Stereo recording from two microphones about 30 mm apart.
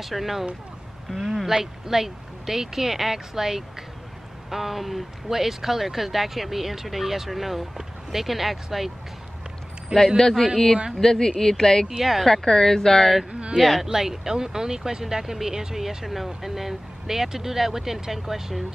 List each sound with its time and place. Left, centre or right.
0.0 s speech: centre
9.9 s speech: right
10.3 s speech: centre
11.0 s speech: centre
12.0 s speech: centre
12.3 s speech: centre
13.3 s a sound: right
13.6 s speech: centre
13.8 s speech: centre